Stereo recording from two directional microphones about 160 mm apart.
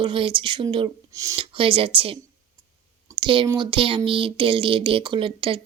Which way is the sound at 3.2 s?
30° right (ahead or behind).